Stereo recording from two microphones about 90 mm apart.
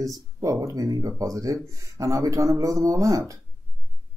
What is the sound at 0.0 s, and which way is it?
Speech, 40° right (ahead or behind).